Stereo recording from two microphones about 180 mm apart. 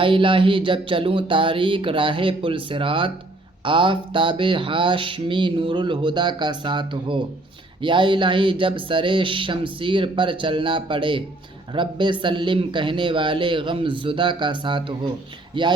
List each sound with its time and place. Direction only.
0.0 s mantra: 30° right (ahead or behind)